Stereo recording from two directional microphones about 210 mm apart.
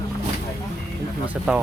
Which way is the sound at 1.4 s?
5° right (ahead or behind).